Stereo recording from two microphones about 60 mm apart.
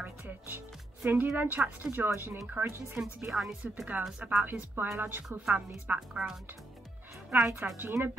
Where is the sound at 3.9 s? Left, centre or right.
Right.